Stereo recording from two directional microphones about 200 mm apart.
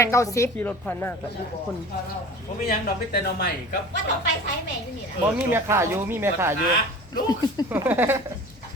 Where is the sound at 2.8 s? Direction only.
50° left (ahead or behind).